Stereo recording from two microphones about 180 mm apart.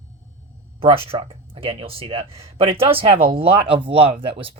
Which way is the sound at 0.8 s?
30° right (ahead or behind).